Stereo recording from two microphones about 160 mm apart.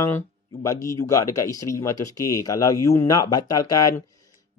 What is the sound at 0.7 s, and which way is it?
Speech, 20° left (ahead or behind).